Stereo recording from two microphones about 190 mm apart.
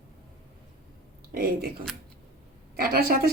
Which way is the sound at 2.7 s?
50° right (ahead or behind).